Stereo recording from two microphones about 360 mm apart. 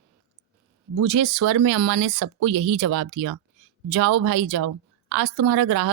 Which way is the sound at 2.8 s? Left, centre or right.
Right.